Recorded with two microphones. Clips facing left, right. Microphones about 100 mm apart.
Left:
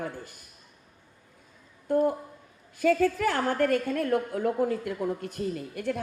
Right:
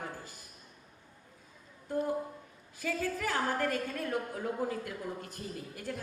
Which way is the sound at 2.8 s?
60° left (ahead or behind).